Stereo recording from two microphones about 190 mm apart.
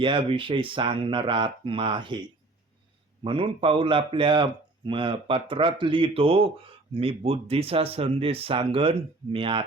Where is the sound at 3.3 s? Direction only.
30° right (ahead or behind).